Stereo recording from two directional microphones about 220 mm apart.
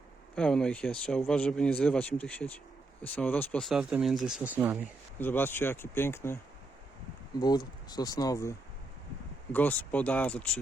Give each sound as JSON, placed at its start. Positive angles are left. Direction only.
{"t": 0.3, "sound": "speech", "side_deg": 5}
{"t": 5.2, "sound": "speech", "side_deg": 10}
{"t": 7.4, "sound": "speech", "side_deg": 20}